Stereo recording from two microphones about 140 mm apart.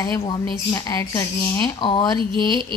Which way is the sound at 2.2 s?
35° right (ahead or behind).